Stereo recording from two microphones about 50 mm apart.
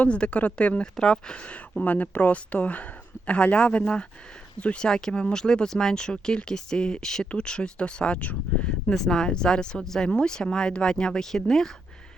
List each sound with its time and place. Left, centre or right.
0.0 s speech: left
1.8 s speech: left
8.9 s speech: centre